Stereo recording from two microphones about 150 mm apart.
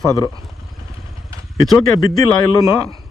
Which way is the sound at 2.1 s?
20° left (ahead or behind).